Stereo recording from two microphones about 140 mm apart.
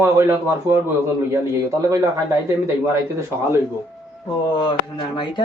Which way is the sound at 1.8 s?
25° right (ahead or behind).